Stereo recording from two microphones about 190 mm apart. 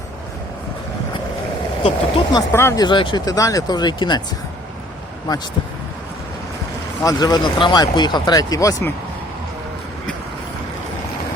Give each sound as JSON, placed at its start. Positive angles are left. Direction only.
{"t": 1.8, "sound": "speech", "side_deg": 30}
{"t": 2.5, "sound": "speech", "side_deg": 15}
{"t": 7.0, "sound": "speech", "side_deg": 20}